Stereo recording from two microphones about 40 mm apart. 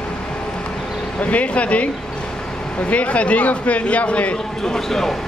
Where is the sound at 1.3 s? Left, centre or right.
Left.